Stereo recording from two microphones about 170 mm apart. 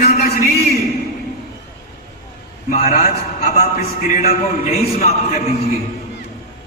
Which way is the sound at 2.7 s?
40° left (ahead or behind).